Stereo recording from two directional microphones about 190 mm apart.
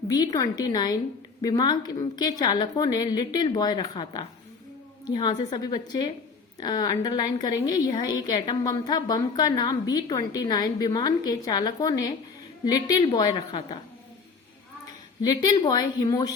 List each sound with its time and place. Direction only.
0.1 s a woman's voice: 20° left (ahead or behind)
15.2 s a woman's voice: 20° left (ahead or behind)